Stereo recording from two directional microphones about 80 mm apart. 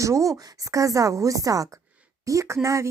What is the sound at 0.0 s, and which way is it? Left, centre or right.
A woman's voice, right.